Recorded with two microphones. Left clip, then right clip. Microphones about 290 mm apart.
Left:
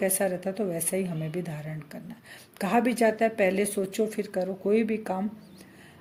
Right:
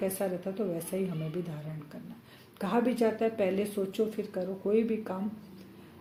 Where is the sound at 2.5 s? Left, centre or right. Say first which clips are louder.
Left 4 dB; left.